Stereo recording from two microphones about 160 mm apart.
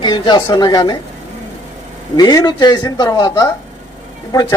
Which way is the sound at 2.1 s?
25° left (ahead or behind).